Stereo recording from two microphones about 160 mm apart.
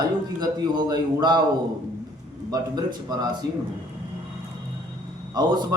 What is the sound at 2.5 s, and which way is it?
Speech, 25° right (ahead or behind).